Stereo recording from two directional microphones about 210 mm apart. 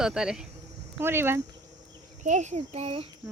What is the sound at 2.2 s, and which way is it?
Speech, 35° right (ahead or behind).